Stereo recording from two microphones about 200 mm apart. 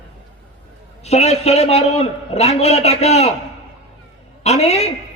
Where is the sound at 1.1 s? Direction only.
30° left (ahead or behind).